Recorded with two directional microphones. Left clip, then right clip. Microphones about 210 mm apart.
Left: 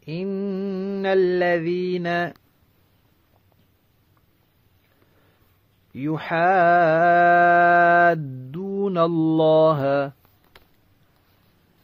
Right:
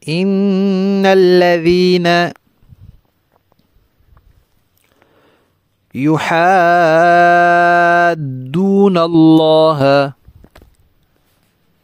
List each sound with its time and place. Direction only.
0.0 s mantra: 60° right (ahead or behind)
5.9 s speech: 60° right (ahead or behind)